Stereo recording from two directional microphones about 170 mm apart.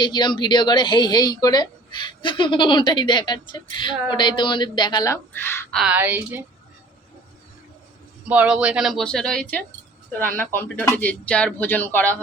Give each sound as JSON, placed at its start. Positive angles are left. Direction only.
{"t": 0.0, "sound": "a woman's voice", "side_deg": 25}
{"t": 5.7, "sound": "a woman's voice", "side_deg": -5}
{"t": 8.3, "sound": "speech", "side_deg": -10}